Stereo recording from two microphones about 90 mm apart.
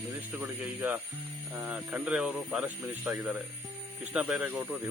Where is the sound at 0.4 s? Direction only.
20° right (ahead or behind).